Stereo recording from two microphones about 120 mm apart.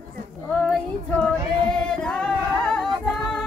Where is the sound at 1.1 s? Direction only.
10° left (ahead or behind).